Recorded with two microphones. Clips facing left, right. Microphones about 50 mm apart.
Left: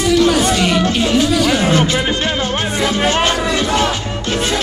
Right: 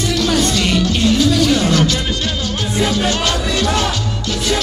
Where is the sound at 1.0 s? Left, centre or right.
Left.